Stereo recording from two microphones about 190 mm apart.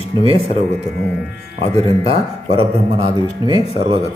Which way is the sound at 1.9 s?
30° right (ahead or behind).